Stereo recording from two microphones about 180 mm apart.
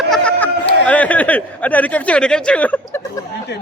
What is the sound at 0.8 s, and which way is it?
Speech, 10° left (ahead or behind).